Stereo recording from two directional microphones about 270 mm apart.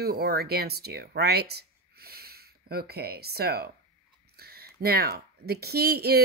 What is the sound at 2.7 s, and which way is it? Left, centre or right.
Speech, right.